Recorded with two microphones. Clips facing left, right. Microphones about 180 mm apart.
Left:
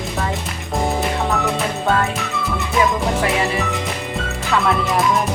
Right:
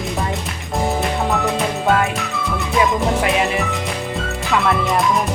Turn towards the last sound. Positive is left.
turn(degrees=0)  # may be behind; listen again after turning